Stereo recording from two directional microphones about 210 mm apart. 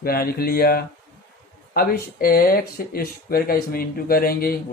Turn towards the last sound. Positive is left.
turn(degrees=45)  # may be behind; listen again after turning